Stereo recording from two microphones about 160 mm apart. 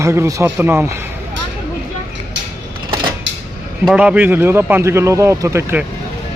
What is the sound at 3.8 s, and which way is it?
A man's voice, 5° right (ahead or behind).